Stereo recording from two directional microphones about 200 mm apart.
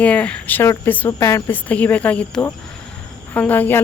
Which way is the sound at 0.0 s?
5° left (ahead or behind).